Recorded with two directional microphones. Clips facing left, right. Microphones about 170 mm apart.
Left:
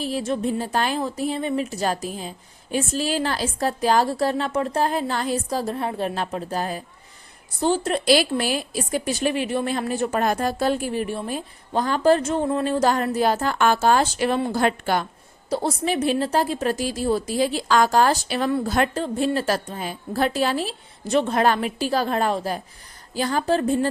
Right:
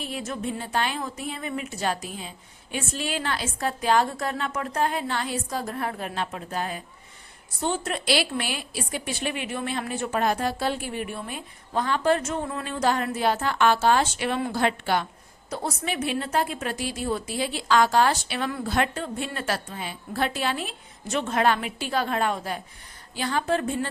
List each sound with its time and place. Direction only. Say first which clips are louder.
0.0 s a woman's voice: left 7 dB; 30° left (ahead or behind)
6.1 s a woman's voice: left 5 dB; 35° left (ahead or behind)
7.9 s a woman's voice: left 6 dB; 40° left (ahead or behind)
15.4 s a woman's voice: left 7 dB; 30° left (ahead or behind)